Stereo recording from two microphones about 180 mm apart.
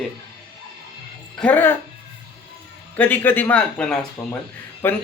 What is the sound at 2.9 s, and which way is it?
Speech, 10° left (ahead or behind).